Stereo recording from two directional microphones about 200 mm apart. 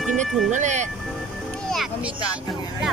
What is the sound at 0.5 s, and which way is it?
Speech, 35° right (ahead or behind).